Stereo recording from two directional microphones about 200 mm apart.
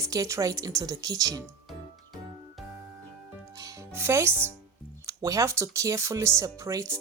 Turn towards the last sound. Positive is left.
turn(degrees=-15)  # may be behind; listen again after turning